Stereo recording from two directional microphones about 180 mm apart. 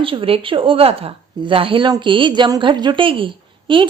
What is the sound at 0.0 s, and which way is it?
A woman's voice, 30° right (ahead or behind).